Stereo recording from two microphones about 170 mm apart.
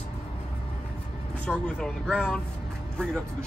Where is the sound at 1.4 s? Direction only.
5° left (ahead or behind).